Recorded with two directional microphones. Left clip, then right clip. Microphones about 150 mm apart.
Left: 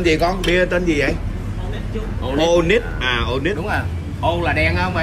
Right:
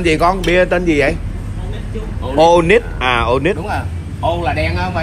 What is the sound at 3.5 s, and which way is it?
Speech, 25° right (ahead or behind).